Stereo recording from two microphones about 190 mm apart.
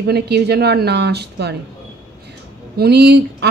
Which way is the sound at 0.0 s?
60° right (ahead or behind).